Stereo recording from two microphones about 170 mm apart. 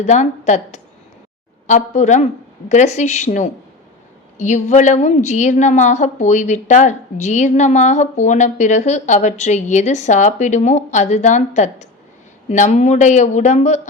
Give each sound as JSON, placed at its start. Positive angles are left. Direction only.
{"t": 0.0, "sound": "a woman's voice", "side_deg": 45}